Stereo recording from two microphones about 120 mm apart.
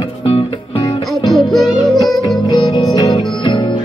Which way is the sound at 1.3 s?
Centre (ahead or behind).